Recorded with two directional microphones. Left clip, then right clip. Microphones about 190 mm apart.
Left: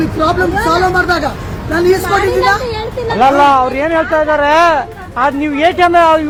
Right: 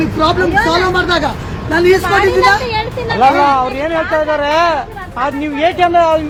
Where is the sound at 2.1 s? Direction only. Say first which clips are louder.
Right 1 dB; 15° right (ahead or behind).